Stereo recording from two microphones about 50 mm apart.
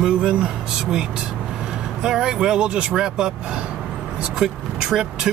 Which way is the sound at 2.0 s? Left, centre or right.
Centre.